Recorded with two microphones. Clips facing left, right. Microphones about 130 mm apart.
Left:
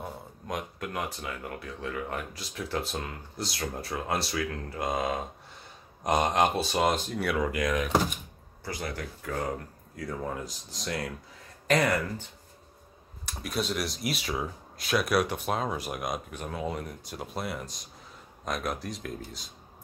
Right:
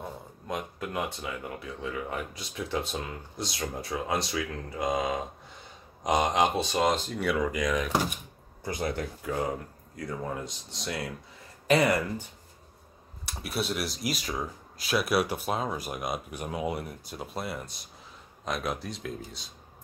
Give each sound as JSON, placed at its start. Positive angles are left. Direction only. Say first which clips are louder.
{"t": 0.0, "sound": "speech", "louder": "even", "side_deg": 0}
{"t": 8.6, "sound": "speech", "louder": "right 4 dB", "side_deg": -20}
{"t": 9.9, "sound": "speech", "louder": "even", "side_deg": 0}
{"t": 13.3, "sound": "speech", "louder": "even", "side_deg": -5}
{"t": 16.3, "sound": "speech", "louder": "right 2 dB", "side_deg": -10}